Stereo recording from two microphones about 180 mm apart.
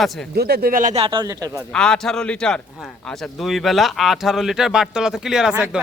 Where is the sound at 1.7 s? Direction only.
5° left (ahead or behind).